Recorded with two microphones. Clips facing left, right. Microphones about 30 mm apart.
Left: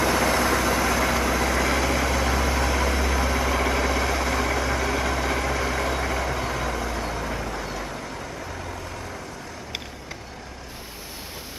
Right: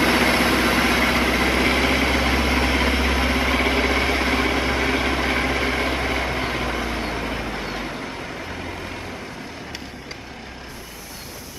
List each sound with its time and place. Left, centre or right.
0.0 s vehicle: right